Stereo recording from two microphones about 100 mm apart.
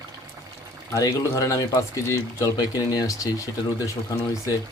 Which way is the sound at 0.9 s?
35° left (ahead or behind).